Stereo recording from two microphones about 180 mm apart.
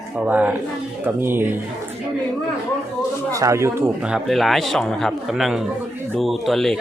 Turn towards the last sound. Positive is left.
turn(degrees=0)  # may be behind; listen again after turning